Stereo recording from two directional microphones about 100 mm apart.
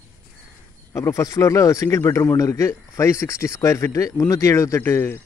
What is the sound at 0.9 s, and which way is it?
A man's voice, 30° left (ahead or behind).